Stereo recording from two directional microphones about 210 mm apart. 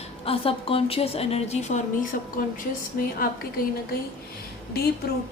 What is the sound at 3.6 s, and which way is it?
Speech, 45° left (ahead or behind).